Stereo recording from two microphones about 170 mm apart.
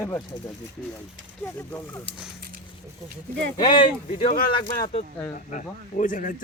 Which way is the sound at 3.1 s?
75° right (ahead or behind).